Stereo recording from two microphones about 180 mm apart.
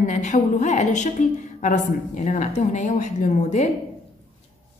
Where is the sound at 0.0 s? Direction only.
40° left (ahead or behind).